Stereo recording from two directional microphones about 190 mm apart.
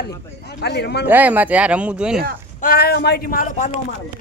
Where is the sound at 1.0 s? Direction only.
10° right (ahead or behind).